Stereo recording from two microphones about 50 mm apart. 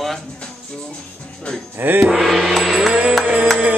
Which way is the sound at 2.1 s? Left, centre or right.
Centre.